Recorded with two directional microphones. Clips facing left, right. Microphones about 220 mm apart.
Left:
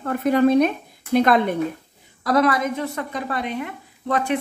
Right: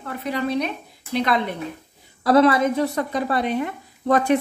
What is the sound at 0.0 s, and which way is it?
Speech, 50° left (ahead or behind).